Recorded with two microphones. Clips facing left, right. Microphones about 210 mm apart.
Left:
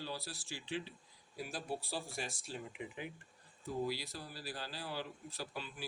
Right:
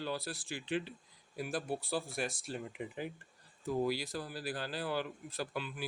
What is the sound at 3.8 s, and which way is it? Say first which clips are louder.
A man's voice: right 5 dB; 50° right (ahead or behind).